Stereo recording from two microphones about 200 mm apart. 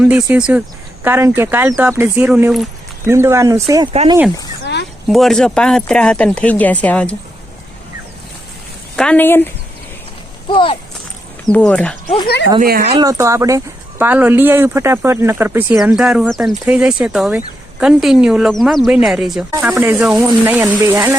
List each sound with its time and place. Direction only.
0.0 s speech: 5° right (ahead or behind)
3.1 s speech: 15° right (ahead or behind)
4.6 s a sound: 60° left (ahead or behind)
5.0 s speech: centre (ahead or behind)
9.0 s speech: 5° left (ahead or behind)
10.5 s speech: 25° left (ahead or behind)
11.5 s speech: 5° left (ahead or behind)
12.0 s speech: 20° left (ahead or behind)
12.8 s speech: 30° right (ahead or behind)
13.1 s speech: 15° right (ahead or behind)
19.5 s speech: 15° right (ahead or behind)